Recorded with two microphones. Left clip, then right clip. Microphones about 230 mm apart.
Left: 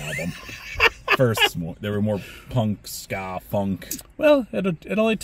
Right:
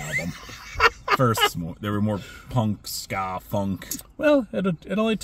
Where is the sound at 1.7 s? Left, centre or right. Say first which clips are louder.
Left 2 dB; centre.